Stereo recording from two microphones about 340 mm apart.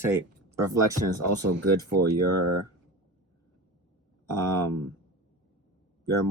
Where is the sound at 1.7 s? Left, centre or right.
Right.